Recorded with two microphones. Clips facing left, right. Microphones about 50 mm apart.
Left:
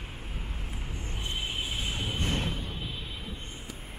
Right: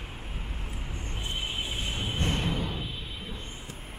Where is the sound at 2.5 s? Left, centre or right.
Right.